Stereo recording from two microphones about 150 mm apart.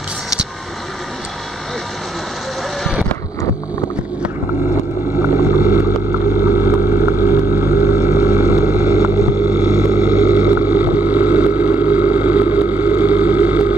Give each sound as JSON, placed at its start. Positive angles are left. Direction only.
{"t": 5.4, "sound": "vehicle", "side_deg": -15}
{"t": 7.2, "sound": "a sound", "side_deg": -20}
{"t": 8.0, "sound": "vehicle", "side_deg": -20}